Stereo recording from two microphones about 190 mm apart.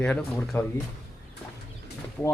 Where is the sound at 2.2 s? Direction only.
5° left (ahead or behind).